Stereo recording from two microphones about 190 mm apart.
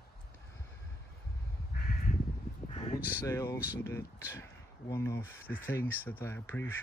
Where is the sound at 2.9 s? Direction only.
10° right (ahead or behind).